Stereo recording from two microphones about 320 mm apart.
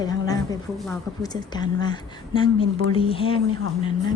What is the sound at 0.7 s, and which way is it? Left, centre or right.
Speech, centre.